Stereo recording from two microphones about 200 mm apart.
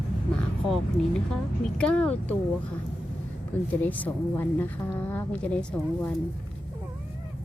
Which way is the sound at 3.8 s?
10° left (ahead or behind).